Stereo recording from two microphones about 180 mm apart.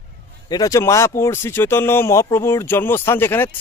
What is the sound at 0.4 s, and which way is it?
Speech, 20° left (ahead or behind).